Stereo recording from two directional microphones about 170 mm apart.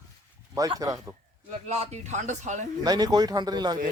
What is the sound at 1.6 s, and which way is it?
Speech, 40° right (ahead or behind).